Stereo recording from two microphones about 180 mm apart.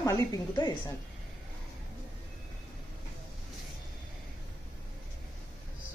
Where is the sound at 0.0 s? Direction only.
20° left (ahead or behind).